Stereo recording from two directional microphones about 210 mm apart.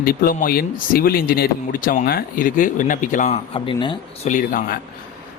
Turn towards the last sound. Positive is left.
turn(degrees=40)  # may be behind; listen again after turning